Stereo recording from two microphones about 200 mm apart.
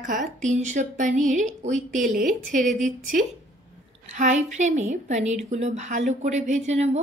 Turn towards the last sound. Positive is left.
turn(degrees=-35)  # may be behind; listen again after turning